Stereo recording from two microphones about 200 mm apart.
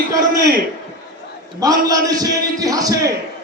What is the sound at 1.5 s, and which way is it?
A man's voice, 20° right (ahead or behind).